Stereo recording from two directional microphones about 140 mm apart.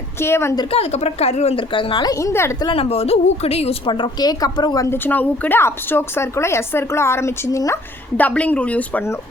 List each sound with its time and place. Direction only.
0.2 s speech: 15° left (ahead or behind)
0.7 s a woman's voice: 45° left (ahead or behind); by 2.6 s 20° left (ahead or behind)
2.6 s a woman's voice: 40° left (ahead or behind)
5.0 s speech: 10° left (ahead or behind)